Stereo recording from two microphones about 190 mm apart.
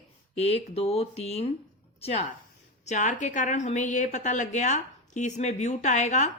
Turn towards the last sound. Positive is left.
turn(degrees=40)  # may be behind; listen again after turning